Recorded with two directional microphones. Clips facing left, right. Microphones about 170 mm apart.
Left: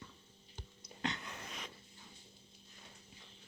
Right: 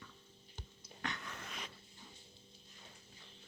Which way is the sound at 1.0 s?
20° left (ahead or behind).